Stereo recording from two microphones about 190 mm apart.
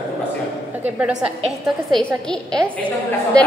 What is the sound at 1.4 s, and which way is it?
Speech, 25° right (ahead or behind).